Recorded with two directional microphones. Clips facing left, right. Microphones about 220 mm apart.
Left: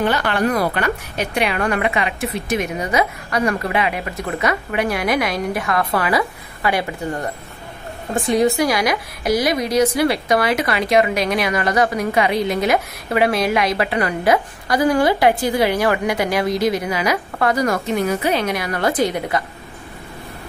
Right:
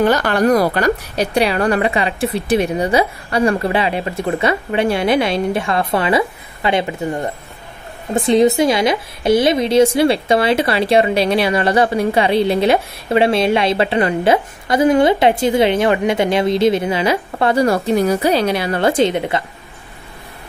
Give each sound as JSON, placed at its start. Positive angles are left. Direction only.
{"t": 0.0, "sound": "a woman's voice", "side_deg": -40}